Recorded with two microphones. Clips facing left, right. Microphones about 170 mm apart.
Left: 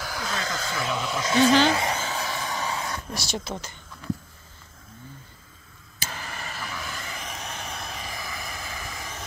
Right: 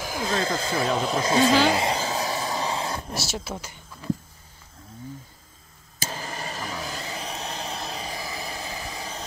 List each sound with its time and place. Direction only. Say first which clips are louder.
0.0 s speech: right 5 dB; 25° right (ahead or behind)
1.7 s a sound: right 2 dB; 30° right (ahead or behind)
3.2 s speech: even; 5° right (ahead or behind)
5.9 s vehicle: right 4 dB; 35° right (ahead or behind)